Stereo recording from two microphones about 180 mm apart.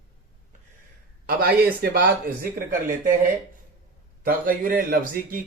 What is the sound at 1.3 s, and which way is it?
Speech, 60° right (ahead or behind).